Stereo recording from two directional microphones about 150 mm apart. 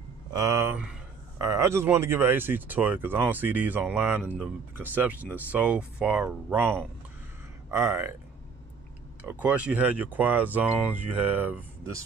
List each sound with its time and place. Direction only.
0.3 s speech: 20° right (ahead or behind)
9.3 s speech: 10° right (ahead or behind)